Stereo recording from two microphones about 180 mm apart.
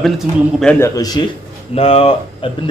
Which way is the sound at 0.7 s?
20° left (ahead or behind).